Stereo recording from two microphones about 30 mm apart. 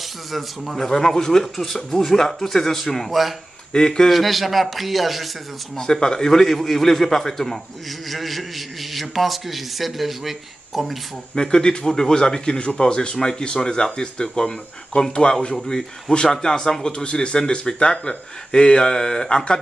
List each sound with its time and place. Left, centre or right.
0.3 s a man's voice: centre
0.8 s speech: centre
3.7 s speech: left
4.1 s a man's voice: centre
5.8 s a man's voice: left; by 11.0 s centre
11.3 s speech: left
17.0 s speech: left
17.4 s speech: left